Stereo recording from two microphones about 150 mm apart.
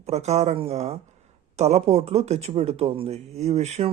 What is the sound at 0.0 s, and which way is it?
Speech, 45° right (ahead or behind).